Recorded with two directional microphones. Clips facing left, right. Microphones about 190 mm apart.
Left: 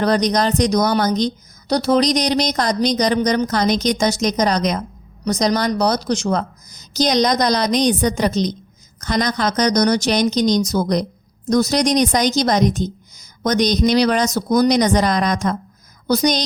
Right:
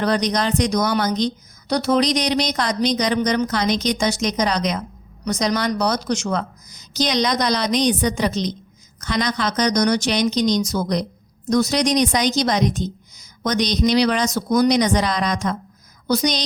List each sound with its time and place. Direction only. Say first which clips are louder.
0.0 s a woman's voice: left 3 dB; 40° left (ahead or behind)